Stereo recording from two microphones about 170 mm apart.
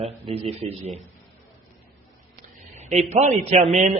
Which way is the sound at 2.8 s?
40° right (ahead or behind).